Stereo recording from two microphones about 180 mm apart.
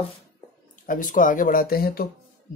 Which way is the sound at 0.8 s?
45° left (ahead or behind).